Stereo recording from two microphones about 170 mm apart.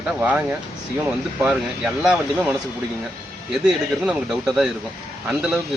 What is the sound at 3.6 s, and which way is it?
Speech, centre (ahead or behind).